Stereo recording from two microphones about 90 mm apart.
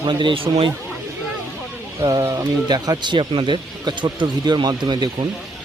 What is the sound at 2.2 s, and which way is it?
Speech, 40° right (ahead or behind).